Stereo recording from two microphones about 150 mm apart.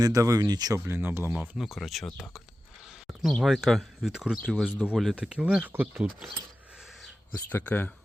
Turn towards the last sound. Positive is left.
turn(degrees=10)  # may be behind; listen again after turning